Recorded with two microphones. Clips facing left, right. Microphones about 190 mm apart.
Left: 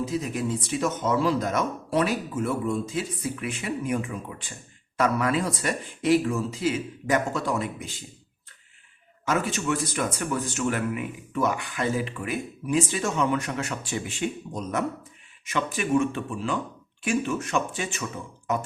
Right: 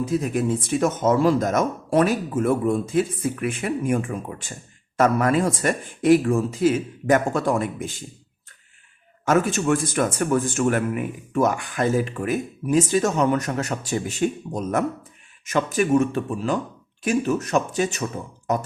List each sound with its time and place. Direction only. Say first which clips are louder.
0.0 s speech: right 5 dB; 55° right (ahead or behind)
9.2 s speech: right 6 dB; 50° right (ahead or behind)